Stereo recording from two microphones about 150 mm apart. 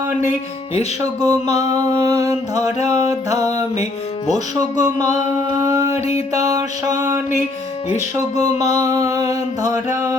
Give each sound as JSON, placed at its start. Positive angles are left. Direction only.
{"t": 1.2, "sound": "music", "side_deg": -25}
{"t": 5.6, "sound": "a sound", "side_deg": -20}
{"t": 5.9, "sound": "music", "side_deg": 45}
{"t": 6.4, "sound": "music", "side_deg": -25}
{"t": 8.1, "sound": "music", "side_deg": -25}